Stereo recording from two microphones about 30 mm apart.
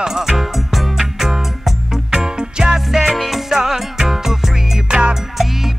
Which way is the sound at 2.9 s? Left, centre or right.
Centre.